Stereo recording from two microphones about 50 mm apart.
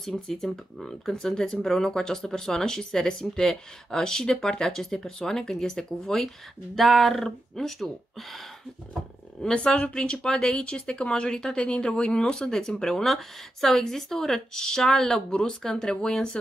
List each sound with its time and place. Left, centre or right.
0.3 s speech: centre
9.4 s speech: centre
9.8 s speech: left